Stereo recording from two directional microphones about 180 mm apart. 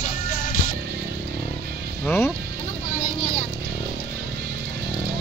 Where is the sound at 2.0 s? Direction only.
15° left (ahead or behind).